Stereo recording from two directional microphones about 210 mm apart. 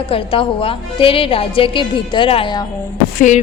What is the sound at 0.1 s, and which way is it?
A woman's voice, 25° left (ahead or behind).